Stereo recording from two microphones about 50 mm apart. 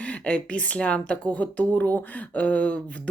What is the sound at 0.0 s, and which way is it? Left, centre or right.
Speech, left.